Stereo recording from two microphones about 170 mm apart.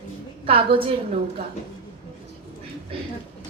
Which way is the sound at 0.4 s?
30° right (ahead or behind).